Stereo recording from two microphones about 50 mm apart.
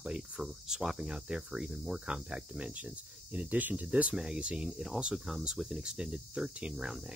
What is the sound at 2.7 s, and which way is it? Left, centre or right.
Speech, right.